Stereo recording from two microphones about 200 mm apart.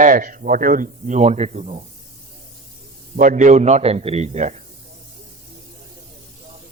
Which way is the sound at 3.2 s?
40° right (ahead or behind).